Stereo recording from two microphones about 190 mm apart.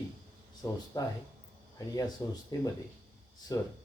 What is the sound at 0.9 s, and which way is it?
Speech, 20° left (ahead or behind).